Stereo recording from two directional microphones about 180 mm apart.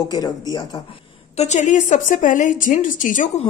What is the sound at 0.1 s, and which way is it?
A woman's voice, 20° left (ahead or behind).